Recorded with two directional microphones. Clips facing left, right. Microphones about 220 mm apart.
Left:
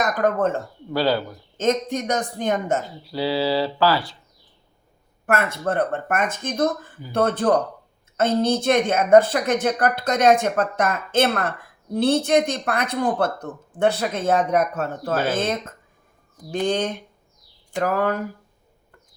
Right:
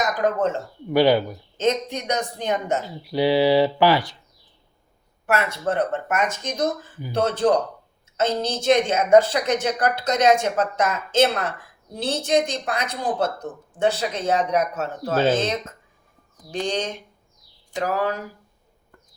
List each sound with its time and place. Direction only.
0.0 s speech: 55° left (ahead or behind)
0.9 s speech: 15° right (ahead or behind)
1.5 s speech: 50° left (ahead or behind)
3.0 s speech: 15° right (ahead or behind)
5.2 s a woman's voice: 50° left (ahead or behind)
15.1 s speech: 25° right (ahead or behind)
16.5 s a woman's voice: 55° left (ahead or behind)